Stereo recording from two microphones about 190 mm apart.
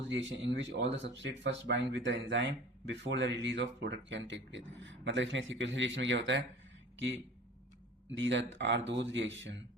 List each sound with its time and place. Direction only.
0.0 s speech: 75° right (ahead or behind)
8.1 s speech: 75° right (ahead or behind)